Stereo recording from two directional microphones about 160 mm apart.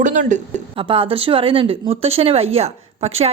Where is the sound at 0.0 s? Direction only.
50° right (ahead or behind).